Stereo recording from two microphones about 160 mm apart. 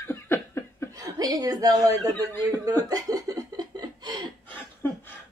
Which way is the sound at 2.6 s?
20° right (ahead or behind).